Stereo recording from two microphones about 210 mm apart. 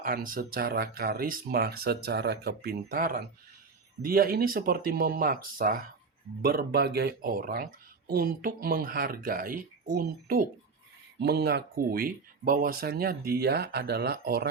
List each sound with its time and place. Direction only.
0.0 s speech: 40° right (ahead or behind)